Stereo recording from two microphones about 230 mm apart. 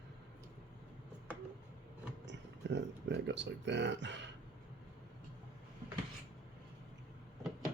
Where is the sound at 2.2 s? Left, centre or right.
Right.